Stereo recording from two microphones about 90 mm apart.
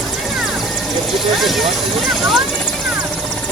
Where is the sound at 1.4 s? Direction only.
Centre (ahead or behind).